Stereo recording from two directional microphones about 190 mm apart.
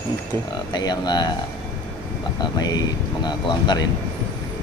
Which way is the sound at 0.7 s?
20° left (ahead or behind).